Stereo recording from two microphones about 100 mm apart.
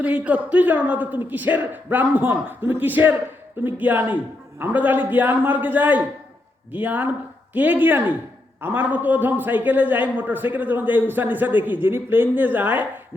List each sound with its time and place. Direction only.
0.0 s a man's voice: 15° right (ahead or behind)